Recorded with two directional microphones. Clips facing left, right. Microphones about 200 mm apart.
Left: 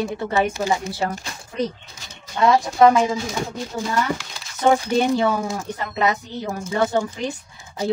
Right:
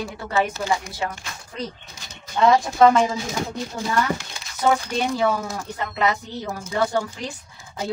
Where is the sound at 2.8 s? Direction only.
15° left (ahead or behind).